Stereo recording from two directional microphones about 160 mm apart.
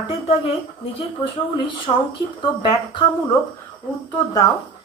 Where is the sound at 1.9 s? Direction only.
25° left (ahead or behind).